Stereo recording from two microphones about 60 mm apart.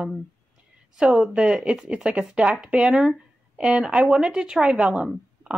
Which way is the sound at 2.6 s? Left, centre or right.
Centre.